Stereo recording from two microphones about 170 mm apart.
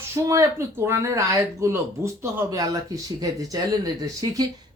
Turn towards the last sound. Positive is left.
turn(degrees=-20)  # may be behind; listen again after turning